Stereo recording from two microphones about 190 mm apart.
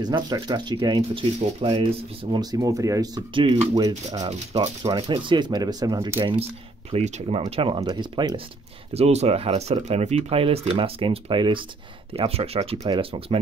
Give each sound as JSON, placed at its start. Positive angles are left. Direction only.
{"t": 0.0, "sound": "speech", "side_deg": -20}
{"t": 6.9, "sound": "speech", "side_deg": -35}
{"t": 8.9, "sound": "speech", "side_deg": -35}